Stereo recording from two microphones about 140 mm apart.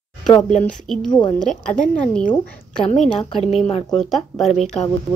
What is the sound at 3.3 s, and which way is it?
Speech, 45° left (ahead or behind).